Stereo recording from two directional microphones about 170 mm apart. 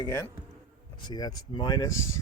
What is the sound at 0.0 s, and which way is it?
Speech, 20° left (ahead or behind).